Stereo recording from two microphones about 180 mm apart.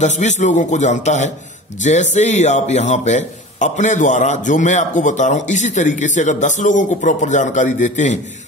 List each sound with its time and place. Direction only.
0.0 s a man's voice: 40° left (ahead or behind)